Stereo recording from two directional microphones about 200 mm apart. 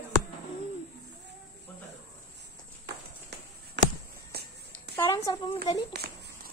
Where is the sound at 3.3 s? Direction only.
55° right (ahead or behind).